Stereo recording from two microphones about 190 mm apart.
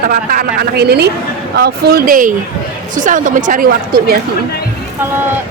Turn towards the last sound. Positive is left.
turn(degrees=-50)  # may be behind; listen again after turning